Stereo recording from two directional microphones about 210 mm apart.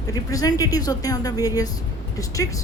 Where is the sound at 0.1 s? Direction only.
15° left (ahead or behind).